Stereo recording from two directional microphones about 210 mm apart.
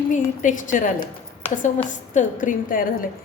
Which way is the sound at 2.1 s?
40° left (ahead or behind).